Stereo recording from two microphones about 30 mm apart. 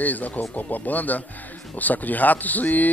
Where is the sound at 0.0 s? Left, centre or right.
Left.